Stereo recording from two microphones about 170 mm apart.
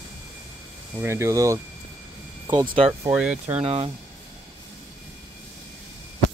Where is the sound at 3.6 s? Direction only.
35° right (ahead or behind).